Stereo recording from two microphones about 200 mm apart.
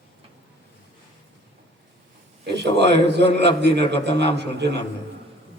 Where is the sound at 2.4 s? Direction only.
55° right (ahead or behind).